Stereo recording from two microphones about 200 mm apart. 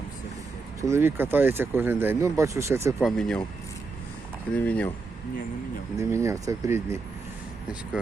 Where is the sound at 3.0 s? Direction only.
5° left (ahead or behind).